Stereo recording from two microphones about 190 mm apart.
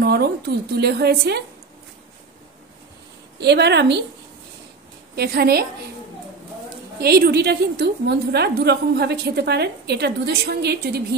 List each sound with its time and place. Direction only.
0.0 s a woman's voice: 60° right (ahead or behind)
3.3 s a woman's voice: 60° right (ahead or behind)
5.1 s a woman's voice: 55° right (ahead or behind)
7.0 s a woman's voice: 55° right (ahead or behind)